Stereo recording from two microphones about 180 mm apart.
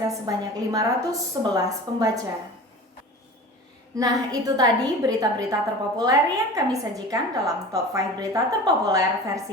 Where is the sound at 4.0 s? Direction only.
20° right (ahead or behind).